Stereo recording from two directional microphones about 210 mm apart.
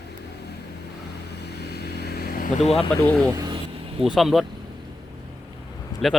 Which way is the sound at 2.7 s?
5° left (ahead or behind).